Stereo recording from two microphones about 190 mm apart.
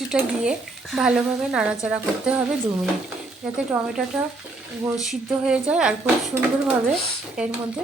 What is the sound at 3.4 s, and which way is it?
Speech, 5° right (ahead or behind).